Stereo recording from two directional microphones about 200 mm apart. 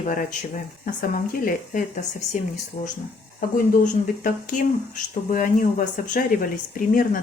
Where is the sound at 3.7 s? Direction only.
45° left (ahead or behind).